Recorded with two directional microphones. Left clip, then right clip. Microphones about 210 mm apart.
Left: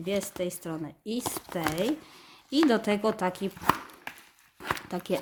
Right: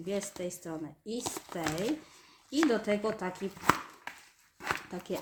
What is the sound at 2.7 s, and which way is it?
Speech, 35° left (ahead or behind).